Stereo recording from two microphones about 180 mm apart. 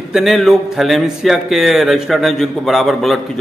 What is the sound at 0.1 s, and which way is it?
Speech, centre (ahead or behind).